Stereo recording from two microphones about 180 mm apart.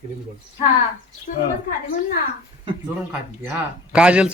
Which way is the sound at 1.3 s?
50° left (ahead or behind).